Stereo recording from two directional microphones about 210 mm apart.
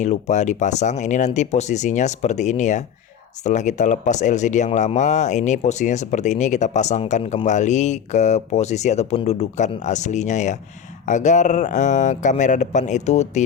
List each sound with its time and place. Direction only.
0.0 s speech: 35° left (ahead or behind)